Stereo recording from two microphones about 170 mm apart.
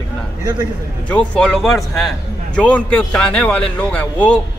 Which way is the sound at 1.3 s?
5° left (ahead or behind).